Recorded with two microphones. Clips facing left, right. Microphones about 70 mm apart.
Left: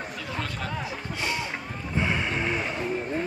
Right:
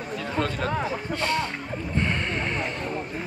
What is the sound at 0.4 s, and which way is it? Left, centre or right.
Speech, right.